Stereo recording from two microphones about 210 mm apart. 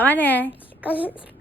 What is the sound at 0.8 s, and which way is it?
Speech, 5° right (ahead or behind).